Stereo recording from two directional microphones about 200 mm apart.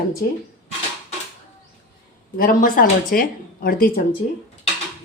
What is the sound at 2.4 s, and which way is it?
A woman's voice, 45° left (ahead or behind).